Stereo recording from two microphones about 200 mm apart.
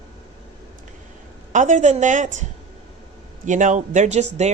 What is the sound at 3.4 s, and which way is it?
Speech, 40° right (ahead or behind).